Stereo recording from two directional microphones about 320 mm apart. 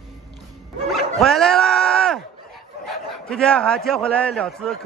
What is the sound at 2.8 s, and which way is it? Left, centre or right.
A man's voice, centre.